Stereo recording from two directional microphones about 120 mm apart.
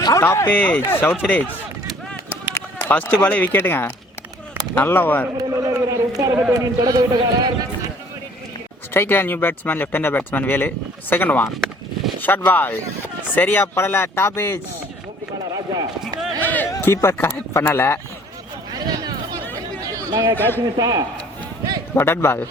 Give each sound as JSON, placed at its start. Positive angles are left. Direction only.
{"t": 0.0, "sound": "speech", "side_deg": 25}
{"t": 2.6, "sound": "speech", "side_deg": 20}
{"t": 5.4, "sound": "a man's voice", "side_deg": -25}
{"t": 8.9, "sound": "speech", "side_deg": 20}
{"t": 15.5, "sound": "a sound", "side_deg": -35}
{"t": 16.4, "sound": "speech", "side_deg": 15}
{"t": 18.7, "sound": "a sound", "side_deg": -35}
{"t": 20.7, "sound": "speech", "side_deg": -35}
{"t": 21.9, "sound": "speech", "side_deg": 20}